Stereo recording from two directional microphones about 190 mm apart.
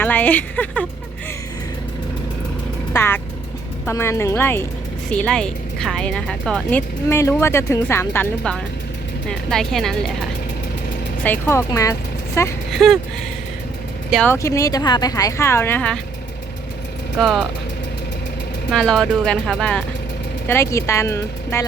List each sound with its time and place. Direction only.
0.0 s speech: 10° left (ahead or behind)
2.9 s speech: 10° left (ahead or behind)
12.7 s speech: centre (ahead or behind)
14.1 s speech: 5° left (ahead or behind)
14.3 s speech: 15° left (ahead or behind)
17.2 s speech: centre (ahead or behind)
18.7 s speech: centre (ahead or behind)
20.5 s speech: 15° left (ahead or behind)